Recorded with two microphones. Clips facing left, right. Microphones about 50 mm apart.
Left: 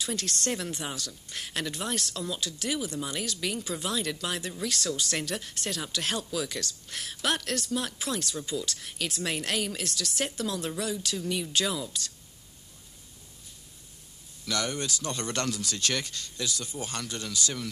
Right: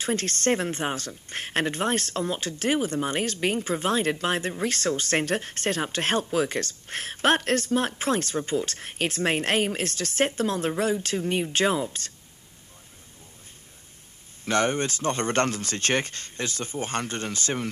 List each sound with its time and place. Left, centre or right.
0.0 s speech: right
14.4 s speech: right